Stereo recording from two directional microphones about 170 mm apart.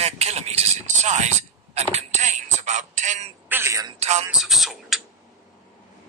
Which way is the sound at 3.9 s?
40° right (ahead or behind).